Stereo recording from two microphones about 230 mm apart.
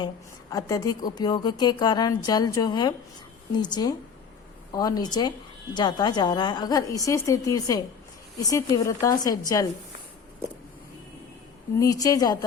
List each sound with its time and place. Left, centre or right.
0.5 s a woman's voice: centre
11.8 s a woman's voice: centre